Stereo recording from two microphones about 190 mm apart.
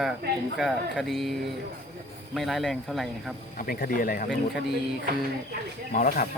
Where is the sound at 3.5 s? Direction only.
50° left (ahead or behind).